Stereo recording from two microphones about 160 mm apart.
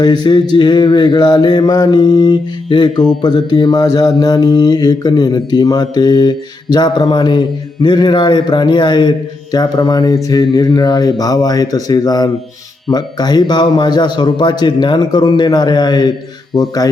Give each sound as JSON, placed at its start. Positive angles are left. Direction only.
{"t": 0.0, "sound": "mantra", "side_deg": 25}